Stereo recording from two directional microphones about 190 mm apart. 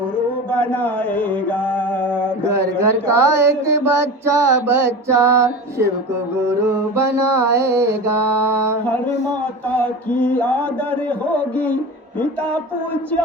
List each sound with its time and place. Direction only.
0.5 s speech: 10° left (ahead or behind)
2.5 s a sound: 15° right (ahead or behind)
9.7 s mantra: 10° left (ahead or behind)